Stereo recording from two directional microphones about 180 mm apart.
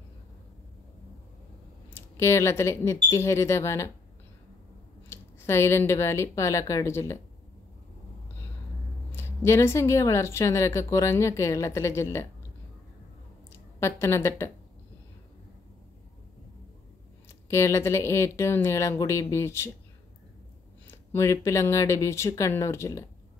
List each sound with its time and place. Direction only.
1.9 s speech: 15° left (ahead or behind)
5.1 s speech: 15° left (ahead or behind)
9.1 s speech: 15° left (ahead or behind)
13.7 s speech: 15° left (ahead or behind)
17.5 s speech: 15° left (ahead or behind)
20.8 s speech: 15° left (ahead or behind)